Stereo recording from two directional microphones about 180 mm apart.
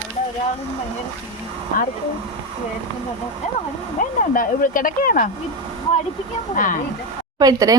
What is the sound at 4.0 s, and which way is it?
Speech, 45° left (ahead or behind).